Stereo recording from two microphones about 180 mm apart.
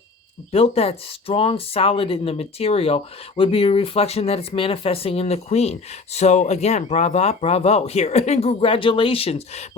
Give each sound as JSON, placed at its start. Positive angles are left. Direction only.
{"t": 0.5, "sound": "speech", "side_deg": 35}